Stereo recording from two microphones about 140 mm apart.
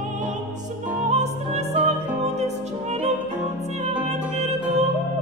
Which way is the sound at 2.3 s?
50° right (ahead or behind).